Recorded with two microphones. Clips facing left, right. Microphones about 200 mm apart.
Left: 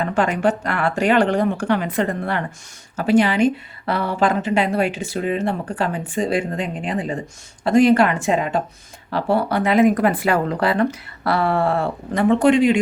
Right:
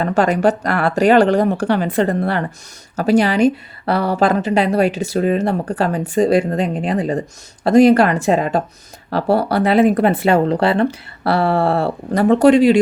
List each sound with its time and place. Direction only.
0.0 s a woman's voice: 40° right (ahead or behind)